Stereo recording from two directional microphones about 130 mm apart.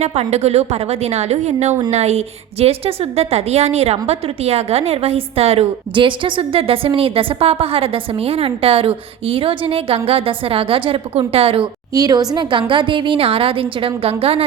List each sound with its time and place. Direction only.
0.0 s a woman's voice: 55° right (ahead or behind)
11.9 s a woman's voice: 30° right (ahead or behind); by 14.4 s 45° right (ahead or behind)